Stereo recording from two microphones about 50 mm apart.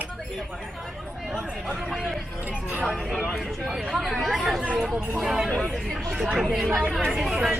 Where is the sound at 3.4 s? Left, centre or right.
Centre.